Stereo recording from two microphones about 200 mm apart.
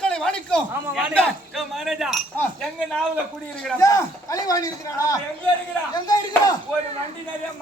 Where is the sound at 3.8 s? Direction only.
15° left (ahead or behind).